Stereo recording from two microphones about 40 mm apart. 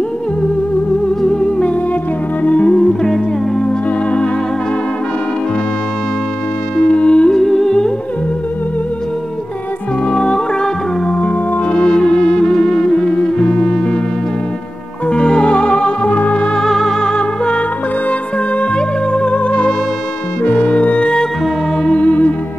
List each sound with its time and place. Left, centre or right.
1.2 s music: centre
2.4 s music: left
2.9 s music: centre
3.6 s music: left
6.8 s music: left
7.3 s music: centre
10.1 s music: centre
11.1 s music: left
11.7 s music: left
15.0 s music: left
16.5 s music: centre
18.6 s music: left